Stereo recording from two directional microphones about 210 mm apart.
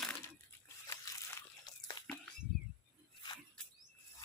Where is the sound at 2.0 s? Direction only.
20° left (ahead or behind).